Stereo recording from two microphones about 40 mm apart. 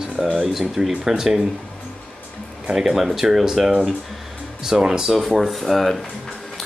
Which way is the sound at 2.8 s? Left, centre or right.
Centre.